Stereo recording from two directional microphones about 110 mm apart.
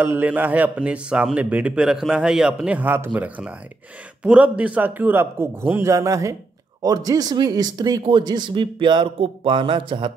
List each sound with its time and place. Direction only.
0.0 s a man's voice: 15° right (ahead or behind); by 10.1 s 50° right (ahead or behind)